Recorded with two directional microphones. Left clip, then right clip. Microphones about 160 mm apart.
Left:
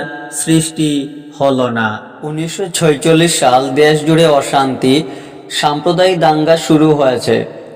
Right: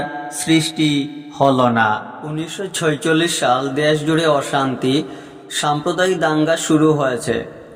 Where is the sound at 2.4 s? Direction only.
20° left (ahead or behind).